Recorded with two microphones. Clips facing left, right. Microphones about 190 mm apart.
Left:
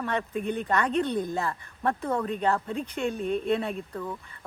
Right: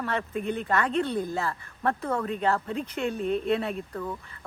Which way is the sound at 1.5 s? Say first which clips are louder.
Even; 15° left (ahead or behind).